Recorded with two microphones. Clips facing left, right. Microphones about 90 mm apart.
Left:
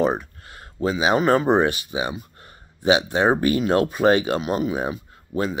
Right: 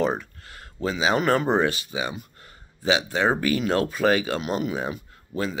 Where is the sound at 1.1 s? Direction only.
30° left (ahead or behind).